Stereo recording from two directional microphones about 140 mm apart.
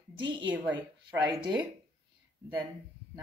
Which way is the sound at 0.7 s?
15° right (ahead or behind).